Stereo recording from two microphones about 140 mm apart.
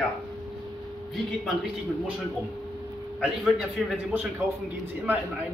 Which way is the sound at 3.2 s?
Centre (ahead or behind).